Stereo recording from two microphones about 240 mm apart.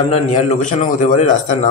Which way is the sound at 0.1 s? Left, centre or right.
Left.